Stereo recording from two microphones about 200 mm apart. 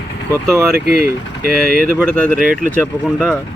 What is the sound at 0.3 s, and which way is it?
Speech, 15° right (ahead or behind).